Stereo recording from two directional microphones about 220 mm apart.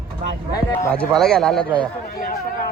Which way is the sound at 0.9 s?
5° left (ahead or behind).